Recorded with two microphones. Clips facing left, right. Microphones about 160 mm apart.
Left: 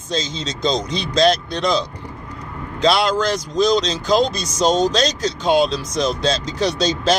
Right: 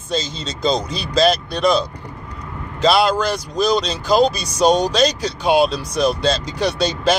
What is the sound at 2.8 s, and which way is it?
Speech, 5° right (ahead or behind).